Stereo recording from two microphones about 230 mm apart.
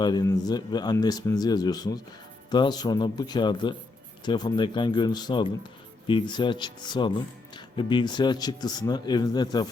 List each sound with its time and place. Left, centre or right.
0.0 s speech: centre